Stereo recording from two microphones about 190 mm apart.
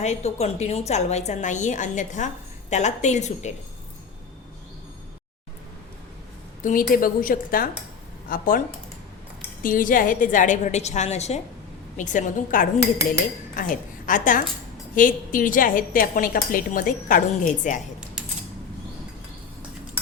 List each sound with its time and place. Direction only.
0.0 s a woman's voice: 35° left (ahead or behind)
6.6 s a woman's voice: 45° left (ahead or behind)
9.6 s a woman's voice: 45° left (ahead or behind)